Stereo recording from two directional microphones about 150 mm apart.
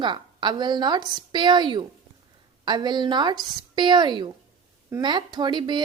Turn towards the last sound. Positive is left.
turn(degrees=-30)  # may be behind; listen again after turning